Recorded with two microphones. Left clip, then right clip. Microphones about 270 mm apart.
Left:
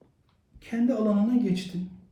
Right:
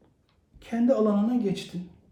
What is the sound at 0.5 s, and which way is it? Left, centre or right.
Speech, centre.